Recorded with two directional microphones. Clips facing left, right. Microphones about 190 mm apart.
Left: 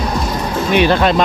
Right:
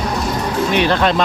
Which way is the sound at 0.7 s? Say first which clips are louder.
Left 4 dB; 10° left (ahead or behind).